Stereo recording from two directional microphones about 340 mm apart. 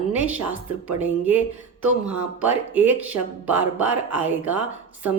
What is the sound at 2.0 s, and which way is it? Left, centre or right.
Speech, centre.